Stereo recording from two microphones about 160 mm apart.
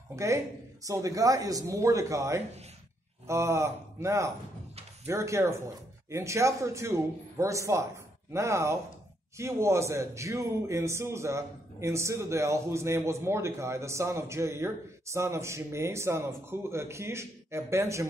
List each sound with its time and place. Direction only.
0.1 s a man's voice: 20° right (ahead or behind)